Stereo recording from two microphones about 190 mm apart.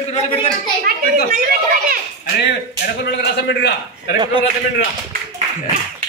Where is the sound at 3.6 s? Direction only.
60° left (ahead or behind).